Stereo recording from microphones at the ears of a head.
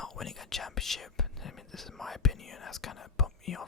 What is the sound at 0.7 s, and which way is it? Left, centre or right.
Whispering, left.